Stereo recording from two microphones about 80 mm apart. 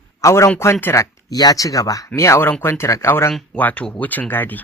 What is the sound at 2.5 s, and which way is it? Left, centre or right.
Speech, left.